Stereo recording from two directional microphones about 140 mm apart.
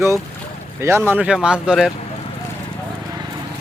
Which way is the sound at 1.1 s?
10° right (ahead or behind).